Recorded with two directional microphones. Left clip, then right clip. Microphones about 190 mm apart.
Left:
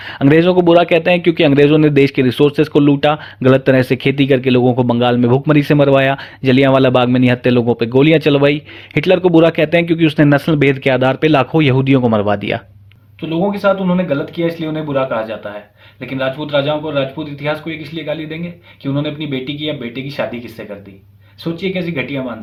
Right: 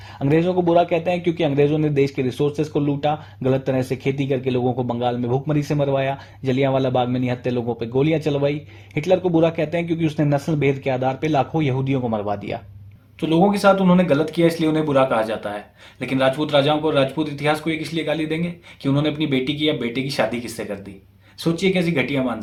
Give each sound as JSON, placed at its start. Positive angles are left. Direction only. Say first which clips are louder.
{"t": 0.2, "sound": "a man's voice", "louder": "left 8 dB", "side_deg": 40}
{"t": 13.2, "sound": "speech", "louder": "left 1 dB", "side_deg": -10}